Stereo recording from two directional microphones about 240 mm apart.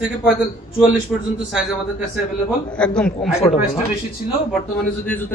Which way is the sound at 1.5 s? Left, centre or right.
Centre.